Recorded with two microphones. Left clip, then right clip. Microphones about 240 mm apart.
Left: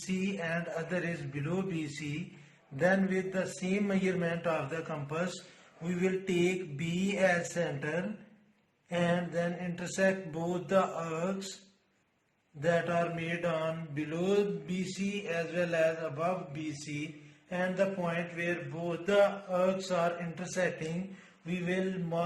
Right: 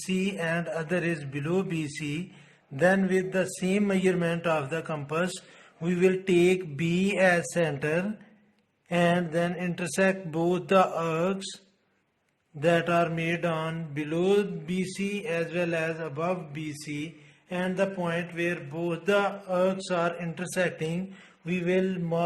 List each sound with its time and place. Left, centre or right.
0.1 s mantra: right
12.5 s mantra: right